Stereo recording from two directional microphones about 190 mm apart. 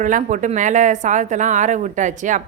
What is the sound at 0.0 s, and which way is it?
A woman's voice, 40° right (ahead or behind).